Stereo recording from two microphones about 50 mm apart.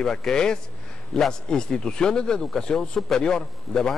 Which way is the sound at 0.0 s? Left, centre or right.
Centre.